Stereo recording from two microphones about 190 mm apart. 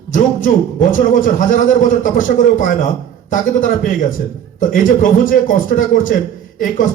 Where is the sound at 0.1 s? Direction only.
45° left (ahead or behind).